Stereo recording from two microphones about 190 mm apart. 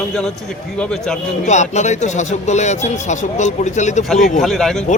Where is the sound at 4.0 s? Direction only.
Centre (ahead or behind).